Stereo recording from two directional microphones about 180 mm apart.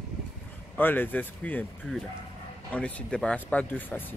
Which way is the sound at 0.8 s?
10° left (ahead or behind).